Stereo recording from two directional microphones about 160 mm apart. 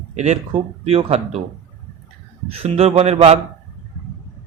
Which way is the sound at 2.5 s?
40° right (ahead or behind).